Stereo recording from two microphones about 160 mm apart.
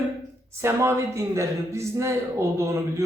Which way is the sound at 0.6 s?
15° right (ahead or behind).